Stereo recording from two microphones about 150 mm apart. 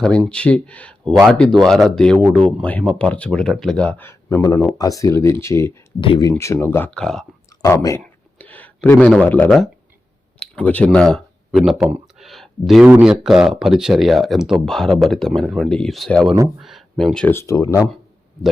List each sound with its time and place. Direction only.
0.0 s speech: 5° left (ahead or behind)
6.0 s speech: 30° left (ahead or behind); by 7.3 s 5° left (ahead or behind)
7.6 s speech: 20° left (ahead or behind)
8.4 s a sound: 10° left (ahead or behind)
10.4 s speech: 10° left (ahead or behind)
12.1 s a sound: centre (ahead or behind)
12.9 s speech: 5° right (ahead or behind)
17.3 s speech: 20° left (ahead or behind)